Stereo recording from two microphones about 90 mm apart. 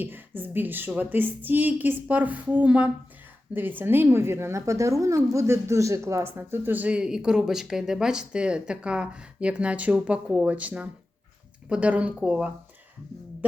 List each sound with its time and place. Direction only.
0.0 s a woman's voice: 20° right (ahead or behind)